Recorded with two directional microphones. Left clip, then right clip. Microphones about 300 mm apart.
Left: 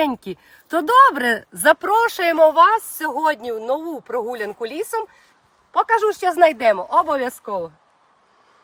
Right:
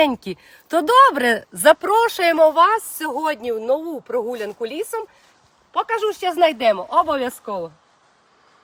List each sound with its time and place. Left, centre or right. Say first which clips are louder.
0.0 s speech: right 3 dB; centre
6.1 s speech: left 2 dB; centre
6.6 s speech: left 1 dB; centre